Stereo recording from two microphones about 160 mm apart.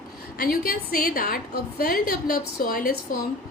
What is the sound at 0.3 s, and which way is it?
A woman's voice, 70° left (ahead or behind).